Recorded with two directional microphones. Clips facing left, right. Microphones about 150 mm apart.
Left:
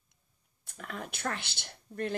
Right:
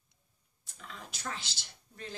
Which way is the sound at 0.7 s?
60° left (ahead or behind).